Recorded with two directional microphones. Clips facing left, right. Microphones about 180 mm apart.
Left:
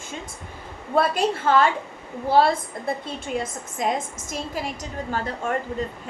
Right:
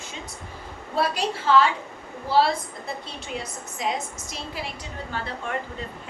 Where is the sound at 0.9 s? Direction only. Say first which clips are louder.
Left 4 dB; 50° left (ahead or behind).